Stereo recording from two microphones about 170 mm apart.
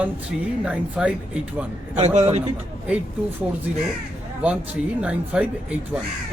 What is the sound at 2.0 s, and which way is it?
Speech, 40° right (ahead or behind).